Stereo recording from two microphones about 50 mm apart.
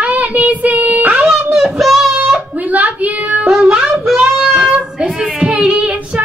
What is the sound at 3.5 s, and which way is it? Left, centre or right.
Child singing, centre.